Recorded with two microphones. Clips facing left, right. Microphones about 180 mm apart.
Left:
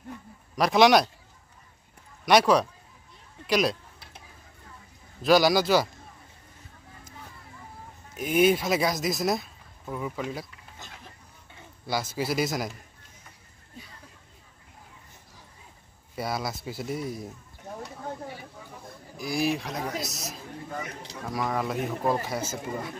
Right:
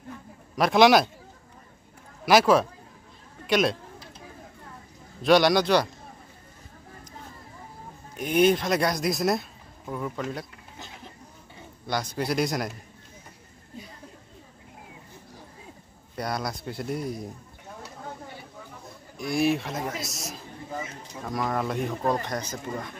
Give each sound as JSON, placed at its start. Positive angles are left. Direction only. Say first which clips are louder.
{"t": 0.6, "sound": "speech", "louder": "right 1 dB", "side_deg": 0}
{"t": 2.2, "sound": "speech", "louder": "right 1 dB", "side_deg": 0}
{"t": 5.2, "sound": "speech", "louder": "right 1 dB", "side_deg": 0}
{"t": 8.4, "sound": "speech", "louder": "right 1 dB", "side_deg": 5}
{"t": 11.9, "sound": "speech", "louder": "right 1 dB", "side_deg": 5}
{"t": 16.2, "sound": "speech", "louder": "right 1 dB", "side_deg": 5}
{"t": 19.1, "sound": "a man's voice", "louder": "right 3 dB", "side_deg": 0}